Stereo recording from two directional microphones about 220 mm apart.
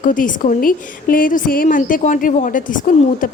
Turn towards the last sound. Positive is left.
turn(degrees=35)  # may be behind; listen again after turning